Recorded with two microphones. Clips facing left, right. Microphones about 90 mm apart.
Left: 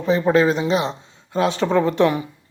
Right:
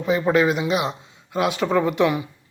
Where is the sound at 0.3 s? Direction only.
30° left (ahead or behind).